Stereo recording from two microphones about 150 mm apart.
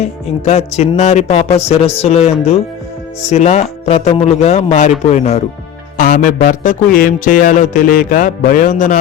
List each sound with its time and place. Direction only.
0.0 s speech: 45° left (ahead or behind)
6.0 s speech: 65° left (ahead or behind)